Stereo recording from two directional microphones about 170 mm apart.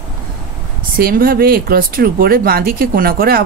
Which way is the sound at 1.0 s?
60° right (ahead or behind).